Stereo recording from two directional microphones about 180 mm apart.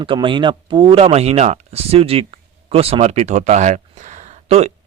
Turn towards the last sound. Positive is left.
turn(degrees=-35)  # may be behind; listen again after turning